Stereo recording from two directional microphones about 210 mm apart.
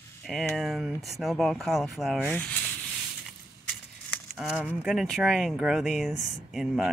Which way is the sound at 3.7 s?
5° left (ahead or behind).